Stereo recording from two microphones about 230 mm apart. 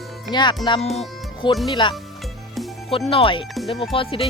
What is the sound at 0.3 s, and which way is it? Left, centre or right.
Speech, centre.